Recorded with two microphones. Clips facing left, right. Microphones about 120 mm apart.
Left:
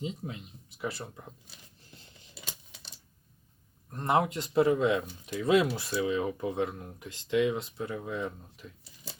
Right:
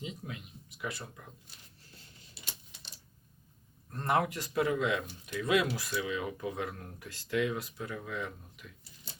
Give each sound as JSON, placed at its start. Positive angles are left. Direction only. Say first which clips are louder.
{"t": 0.0, "sound": "speech", "louder": "left 5 dB", "side_deg": 30}
{"t": 3.9, "sound": "speech", "louder": "left 3 dB", "side_deg": 20}